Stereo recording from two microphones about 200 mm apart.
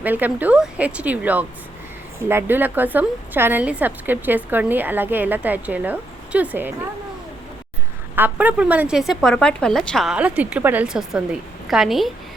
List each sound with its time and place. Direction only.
0.0 s a woman's voice: 10° right (ahead or behind)
8.1 s a woman's voice: 10° right (ahead or behind)